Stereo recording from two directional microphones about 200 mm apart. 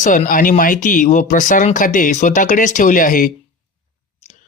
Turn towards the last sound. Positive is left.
turn(degrees=40)  # may be behind; listen again after turning